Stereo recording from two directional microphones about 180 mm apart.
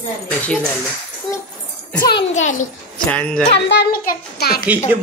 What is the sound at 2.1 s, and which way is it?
Speech, 40° left (ahead or behind).